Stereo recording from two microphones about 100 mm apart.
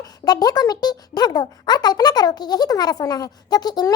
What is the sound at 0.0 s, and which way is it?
A child's voice, 40° left (ahead or behind).